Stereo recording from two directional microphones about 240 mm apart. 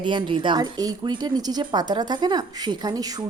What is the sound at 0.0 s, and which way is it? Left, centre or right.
Speech, centre.